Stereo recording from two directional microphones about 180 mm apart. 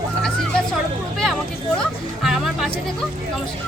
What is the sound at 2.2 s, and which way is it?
Music, centre (ahead or behind).